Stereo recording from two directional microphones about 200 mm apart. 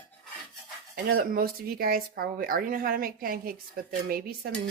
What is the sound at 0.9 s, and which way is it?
Speech, 50° right (ahead or behind).